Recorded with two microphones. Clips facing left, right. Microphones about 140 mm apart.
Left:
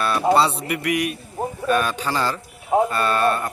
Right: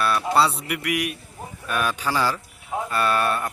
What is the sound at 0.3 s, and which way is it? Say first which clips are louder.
Speech: left 2 dB; 5° right (ahead or behind).